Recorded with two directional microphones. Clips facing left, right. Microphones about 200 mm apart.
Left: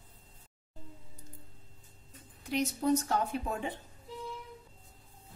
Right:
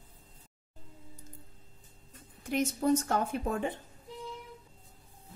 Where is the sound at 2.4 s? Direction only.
50° right (ahead or behind).